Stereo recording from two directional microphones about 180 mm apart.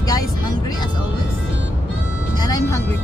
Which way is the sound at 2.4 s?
20° left (ahead or behind).